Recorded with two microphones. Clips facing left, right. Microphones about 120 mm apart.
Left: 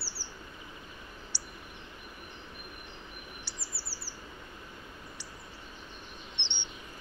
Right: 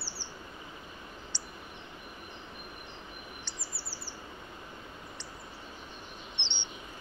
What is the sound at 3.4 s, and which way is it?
Chirp, 5° left (ahead or behind).